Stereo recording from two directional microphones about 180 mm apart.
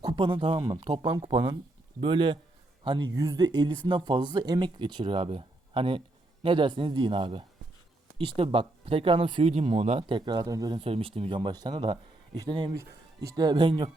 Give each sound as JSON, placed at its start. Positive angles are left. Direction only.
{"t": 0.0, "sound": "speech", "side_deg": -25}